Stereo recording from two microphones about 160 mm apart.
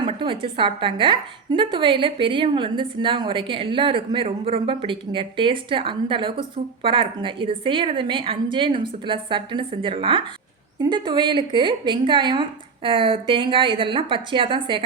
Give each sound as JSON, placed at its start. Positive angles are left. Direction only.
{"t": 0.0, "sound": "a woman's voice", "side_deg": -35}